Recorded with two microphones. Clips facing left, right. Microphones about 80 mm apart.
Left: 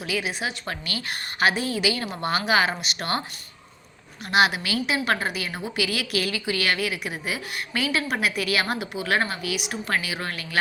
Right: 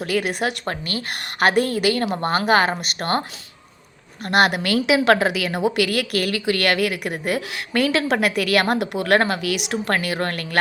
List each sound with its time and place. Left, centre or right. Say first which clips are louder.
0.0 s a woman's voice: right 6 dB; right
0.6 s a woman's voice: right 5 dB; right
4.3 s a woman's voice: right 3 dB; right